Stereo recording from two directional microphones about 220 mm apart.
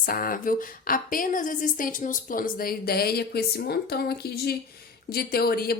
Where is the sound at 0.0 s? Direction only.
40° left (ahead or behind).